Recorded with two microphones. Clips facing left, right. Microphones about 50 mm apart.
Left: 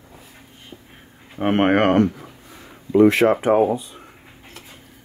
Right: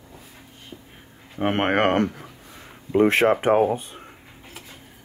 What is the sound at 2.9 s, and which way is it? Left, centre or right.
Speech, right.